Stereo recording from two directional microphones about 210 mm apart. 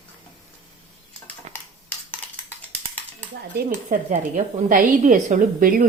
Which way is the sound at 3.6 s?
40° right (ahead or behind).